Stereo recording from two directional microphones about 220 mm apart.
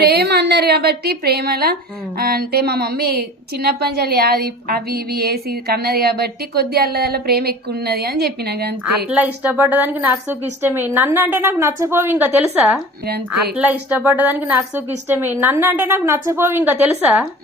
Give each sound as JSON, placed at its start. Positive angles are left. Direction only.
{"t": 0.0, "sound": "a woman's voice", "side_deg": -45}
{"t": 9.0, "sound": "a woman's voice", "side_deg": -5}